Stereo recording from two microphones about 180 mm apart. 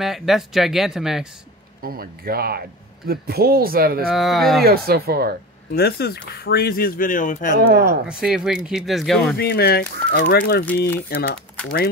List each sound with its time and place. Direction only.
0.0 s speech: centre (ahead or behind)
1.8 s speech: 55° right (ahead or behind)
4.1 s speech: centre (ahead or behind)
4.6 s speech: 55° right (ahead or behind)
5.7 s speech: 60° left (ahead or behind); by 7.5 s 45° left (ahead or behind)
7.5 s speech: 65° right (ahead or behind)
8.1 s speech: 5° right (ahead or behind)
9.4 s speech: 60° left (ahead or behind)